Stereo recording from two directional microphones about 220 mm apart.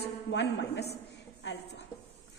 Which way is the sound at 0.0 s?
50° left (ahead or behind).